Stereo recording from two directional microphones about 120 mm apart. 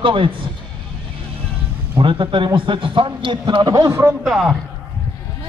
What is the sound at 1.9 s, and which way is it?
A man's voice, 45° right (ahead or behind).